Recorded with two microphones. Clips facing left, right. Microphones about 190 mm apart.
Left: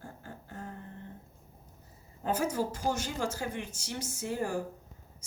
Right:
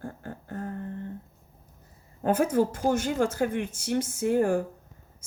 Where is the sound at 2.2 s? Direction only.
55° right (ahead or behind).